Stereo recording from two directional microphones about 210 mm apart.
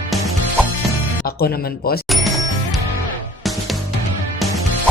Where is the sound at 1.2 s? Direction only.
45° left (ahead or behind).